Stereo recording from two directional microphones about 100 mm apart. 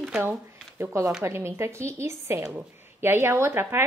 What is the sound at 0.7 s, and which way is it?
A woman's voice, 25° right (ahead or behind).